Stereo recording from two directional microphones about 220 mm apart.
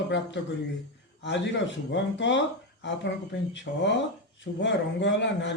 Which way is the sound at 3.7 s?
55° left (ahead or behind).